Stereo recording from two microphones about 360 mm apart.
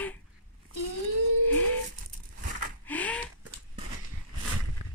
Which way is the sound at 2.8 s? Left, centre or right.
Centre.